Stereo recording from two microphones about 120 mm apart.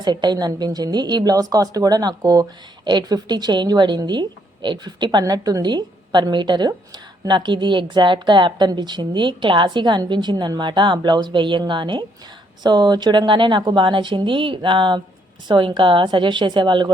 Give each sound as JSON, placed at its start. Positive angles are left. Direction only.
{"t": 0.0, "sound": "a woman's voice", "side_deg": -40}
{"t": 5.2, "sound": "a woman's voice", "side_deg": -30}